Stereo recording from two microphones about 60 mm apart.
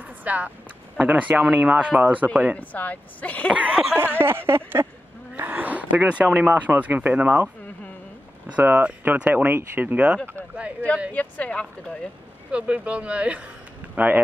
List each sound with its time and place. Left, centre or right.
0.2 s speech: right
2.5 s a woman's voice: left
3.5 s speech: right
3.9 s speech: right
8.5 s speech: right
11.1 s a woman's voice: left
12.4 s speech: right
13.9 s speech: right